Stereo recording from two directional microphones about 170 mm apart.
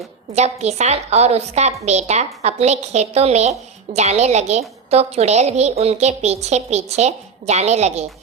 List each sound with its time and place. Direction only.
0.3 s a woman's voice: 40° right (ahead or behind)